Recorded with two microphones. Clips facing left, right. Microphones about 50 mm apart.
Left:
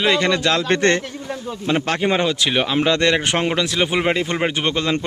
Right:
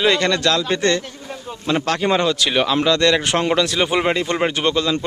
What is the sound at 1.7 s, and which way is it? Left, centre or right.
A man's voice, centre.